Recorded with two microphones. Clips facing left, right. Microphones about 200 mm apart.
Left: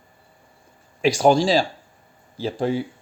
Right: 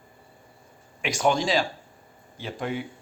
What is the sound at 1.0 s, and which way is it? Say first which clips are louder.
Speech: left 7 dB; 35° left (ahead or behind).